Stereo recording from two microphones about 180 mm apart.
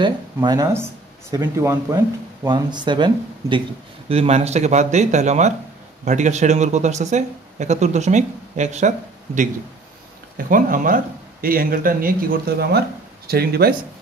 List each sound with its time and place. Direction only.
0.0 s speech: 25° right (ahead or behind); by 13.7 s 60° right (ahead or behind)